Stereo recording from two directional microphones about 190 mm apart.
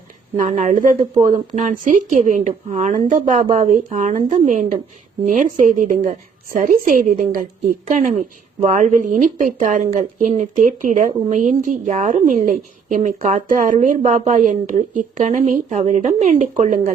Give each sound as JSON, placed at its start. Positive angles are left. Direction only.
{"t": 0.3, "sound": "a woman's voice", "side_deg": -40}